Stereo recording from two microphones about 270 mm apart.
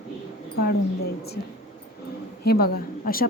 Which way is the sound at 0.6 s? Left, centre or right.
Left.